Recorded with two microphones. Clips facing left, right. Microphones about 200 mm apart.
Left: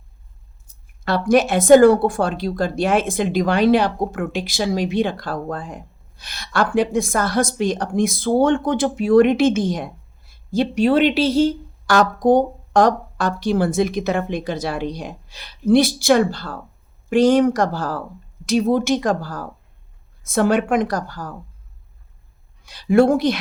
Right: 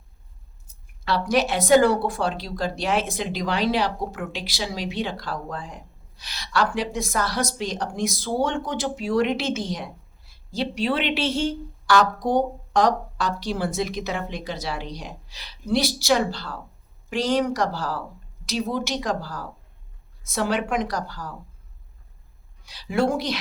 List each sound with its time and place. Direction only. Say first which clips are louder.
1.0 s a woman's voice: left 6 dB; 50° left (ahead or behind)
22.6 s a woman's voice: left 8 dB; 50° left (ahead or behind)